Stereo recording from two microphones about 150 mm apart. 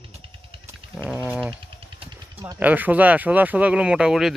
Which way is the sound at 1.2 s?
5° right (ahead or behind).